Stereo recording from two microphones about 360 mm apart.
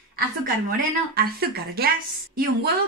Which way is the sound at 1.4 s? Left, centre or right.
Right.